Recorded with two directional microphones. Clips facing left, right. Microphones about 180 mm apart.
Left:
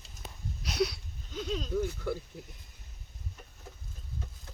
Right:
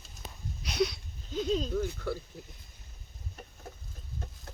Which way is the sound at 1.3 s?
35° right (ahead or behind).